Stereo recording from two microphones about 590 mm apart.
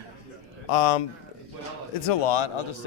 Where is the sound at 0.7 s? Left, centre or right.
Left.